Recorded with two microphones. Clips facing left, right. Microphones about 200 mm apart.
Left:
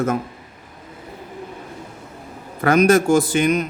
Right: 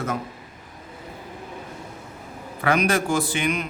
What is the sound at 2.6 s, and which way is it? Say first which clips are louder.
A man's voice: left 7 dB; 45° left (ahead or behind).